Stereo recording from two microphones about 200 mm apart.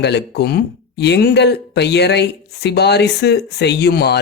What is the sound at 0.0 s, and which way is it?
Speech, 55° left (ahead or behind).